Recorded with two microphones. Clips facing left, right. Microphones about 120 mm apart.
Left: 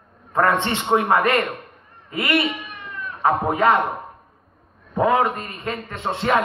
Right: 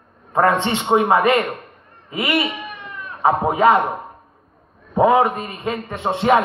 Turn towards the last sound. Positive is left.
turn(degrees=-20)  # may be behind; listen again after turning